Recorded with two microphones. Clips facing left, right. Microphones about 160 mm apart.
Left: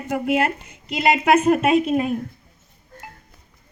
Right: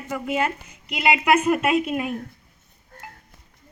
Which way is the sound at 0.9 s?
40° left (ahead or behind).